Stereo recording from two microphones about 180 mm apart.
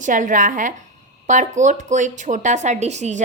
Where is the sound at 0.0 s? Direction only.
45° right (ahead or behind).